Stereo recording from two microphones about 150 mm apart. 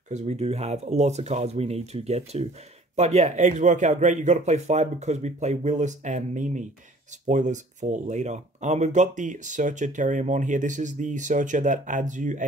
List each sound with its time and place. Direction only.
0.1 s speech: 50° right (ahead or behind)